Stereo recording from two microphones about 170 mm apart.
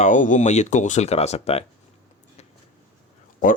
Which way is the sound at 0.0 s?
50° left (ahead or behind).